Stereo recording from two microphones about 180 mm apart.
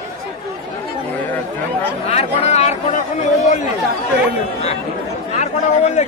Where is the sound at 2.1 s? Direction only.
35° left (ahead or behind).